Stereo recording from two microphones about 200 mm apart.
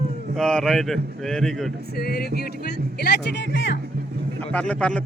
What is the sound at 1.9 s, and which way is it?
Speech, 50° left (ahead or behind).